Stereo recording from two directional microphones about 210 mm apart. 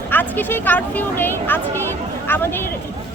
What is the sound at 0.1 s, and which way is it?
A woman's voice, 10° left (ahead or behind).